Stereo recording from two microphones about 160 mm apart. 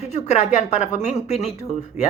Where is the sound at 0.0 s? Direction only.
45° left (ahead or behind).